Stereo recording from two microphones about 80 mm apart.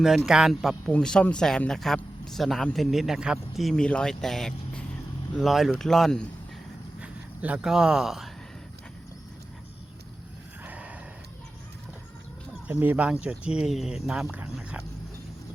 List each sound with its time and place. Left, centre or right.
0.0 s speech: centre
0.9 s speech: centre
7.0 s speech: centre
10.6 s a sound: centre
12.6 s speech: right